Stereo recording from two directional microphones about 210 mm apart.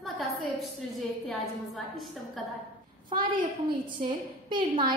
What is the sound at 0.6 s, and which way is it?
Speech, centre (ahead or behind).